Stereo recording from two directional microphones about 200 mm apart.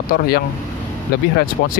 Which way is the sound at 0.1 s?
50° left (ahead or behind).